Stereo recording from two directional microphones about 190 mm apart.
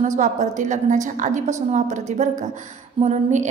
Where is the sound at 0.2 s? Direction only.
40° right (ahead or behind).